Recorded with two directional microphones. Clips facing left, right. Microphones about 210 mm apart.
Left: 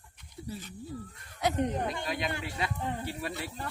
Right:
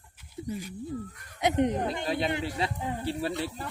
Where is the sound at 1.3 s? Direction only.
20° right (ahead or behind).